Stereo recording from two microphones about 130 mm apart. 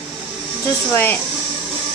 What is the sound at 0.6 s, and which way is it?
Speech, 20° left (ahead or behind).